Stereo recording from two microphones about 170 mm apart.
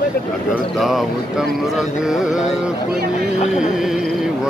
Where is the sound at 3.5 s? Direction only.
5° right (ahead or behind).